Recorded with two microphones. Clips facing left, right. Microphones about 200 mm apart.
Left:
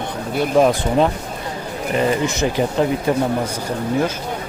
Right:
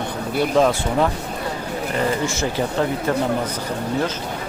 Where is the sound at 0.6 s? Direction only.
20° left (ahead or behind).